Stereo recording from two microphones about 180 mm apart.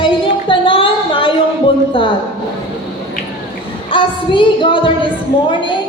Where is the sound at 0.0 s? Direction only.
30° left (ahead or behind).